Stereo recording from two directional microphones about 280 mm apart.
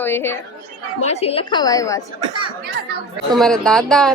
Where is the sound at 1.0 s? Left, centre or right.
Left.